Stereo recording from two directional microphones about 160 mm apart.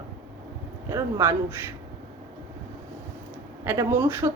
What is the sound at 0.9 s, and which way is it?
Speech, 15° right (ahead or behind).